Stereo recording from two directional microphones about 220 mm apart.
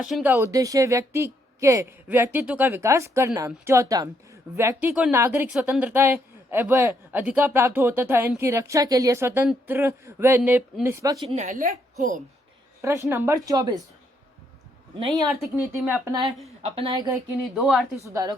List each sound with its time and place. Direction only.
0.0 s speech: 5° right (ahead or behind)
11.3 s a woman's voice: 35° right (ahead or behind)
12.8 s speech: 15° right (ahead or behind)
15.4 s speech: 5° right (ahead or behind)
16.6 s a woman's voice: 25° right (ahead or behind)
17.5 s a woman's voice: centre (ahead or behind)
18.1 s speech: 15° right (ahead or behind)